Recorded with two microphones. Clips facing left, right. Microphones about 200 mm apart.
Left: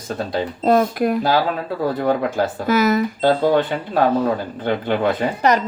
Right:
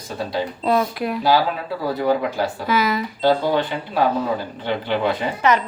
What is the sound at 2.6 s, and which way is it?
Speech, 45° left (ahead or behind).